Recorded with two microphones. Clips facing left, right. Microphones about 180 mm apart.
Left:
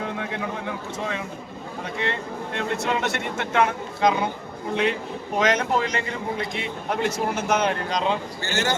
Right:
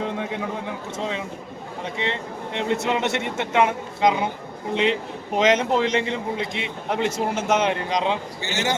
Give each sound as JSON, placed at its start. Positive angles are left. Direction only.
{"t": 0.9, "sound": "a man's voice", "side_deg": -20}
{"t": 2.6, "sound": "a man's voice", "side_deg": -20}